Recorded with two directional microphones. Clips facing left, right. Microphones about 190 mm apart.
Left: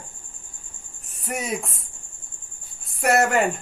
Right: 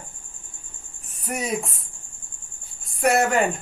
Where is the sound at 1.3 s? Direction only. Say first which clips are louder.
Right 1 dB; centre (ahead or behind).